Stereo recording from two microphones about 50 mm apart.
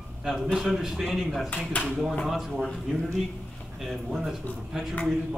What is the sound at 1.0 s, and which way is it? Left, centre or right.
A man's voice, centre.